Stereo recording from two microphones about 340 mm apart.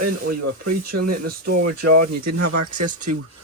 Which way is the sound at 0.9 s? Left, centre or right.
Right.